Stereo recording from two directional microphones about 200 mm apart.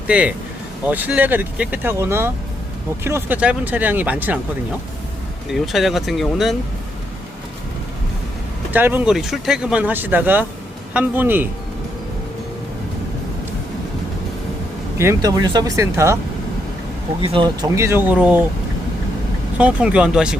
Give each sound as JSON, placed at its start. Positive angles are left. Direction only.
{"t": 0.1, "sound": "speech", "side_deg": -5}
{"t": 5.5, "sound": "speech", "side_deg": 0}
{"t": 8.7, "sound": "speech", "side_deg": -10}
{"t": 14.9, "sound": "speech", "side_deg": -15}
{"t": 17.2, "sound": "speech", "side_deg": -25}
{"t": 19.5, "sound": "speech", "side_deg": -5}